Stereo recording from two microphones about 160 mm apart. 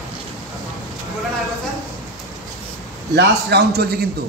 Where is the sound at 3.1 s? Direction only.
90° right.